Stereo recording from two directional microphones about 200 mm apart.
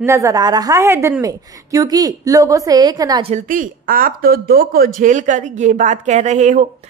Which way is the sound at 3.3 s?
40° right (ahead or behind).